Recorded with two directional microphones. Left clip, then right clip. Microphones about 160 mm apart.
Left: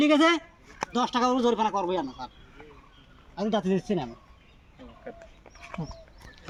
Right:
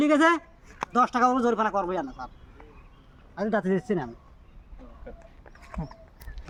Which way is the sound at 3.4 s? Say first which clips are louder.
Right 1 dB; centre (ahead or behind).